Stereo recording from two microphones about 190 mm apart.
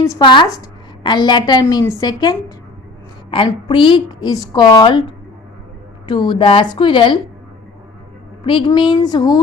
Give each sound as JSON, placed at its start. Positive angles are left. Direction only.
{"t": 0.0, "sound": "a woman's voice", "side_deg": 20}
{"t": 8.4, "sound": "a woman's voice", "side_deg": 25}